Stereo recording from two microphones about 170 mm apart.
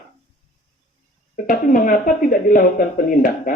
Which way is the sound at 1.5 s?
50° left (ahead or behind).